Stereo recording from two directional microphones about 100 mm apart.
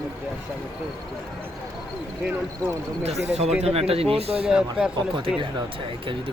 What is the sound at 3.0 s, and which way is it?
Speech, 90° right.